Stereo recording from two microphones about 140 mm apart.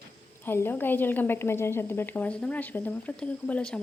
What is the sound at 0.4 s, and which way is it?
A woman's voice, 15° left (ahead or behind).